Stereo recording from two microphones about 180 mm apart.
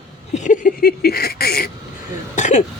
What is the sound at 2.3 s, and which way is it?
Throat clearing, 40° left (ahead or behind).